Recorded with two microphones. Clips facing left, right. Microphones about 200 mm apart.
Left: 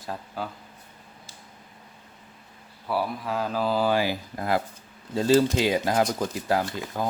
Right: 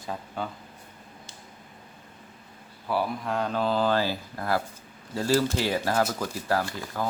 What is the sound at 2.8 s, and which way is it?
Speech, centre (ahead or behind).